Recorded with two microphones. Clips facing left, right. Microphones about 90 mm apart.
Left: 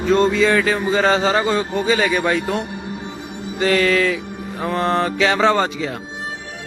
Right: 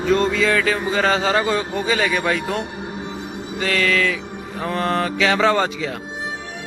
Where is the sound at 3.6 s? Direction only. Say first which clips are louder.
Left 4 dB; 30° left (ahead or behind).